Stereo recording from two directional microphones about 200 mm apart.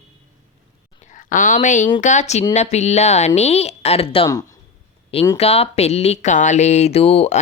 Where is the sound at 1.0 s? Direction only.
40° left (ahead or behind); by 5.4 s 20° left (ahead or behind).